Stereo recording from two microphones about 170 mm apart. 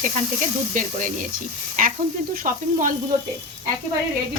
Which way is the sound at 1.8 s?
50° right (ahead or behind).